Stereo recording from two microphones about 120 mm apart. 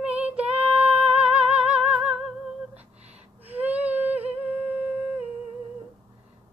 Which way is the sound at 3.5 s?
15° right (ahead or behind).